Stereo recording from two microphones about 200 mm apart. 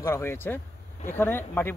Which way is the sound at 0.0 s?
15° left (ahead or behind).